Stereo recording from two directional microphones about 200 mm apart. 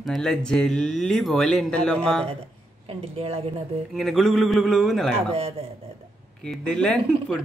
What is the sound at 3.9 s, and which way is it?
Speech, centre (ahead or behind).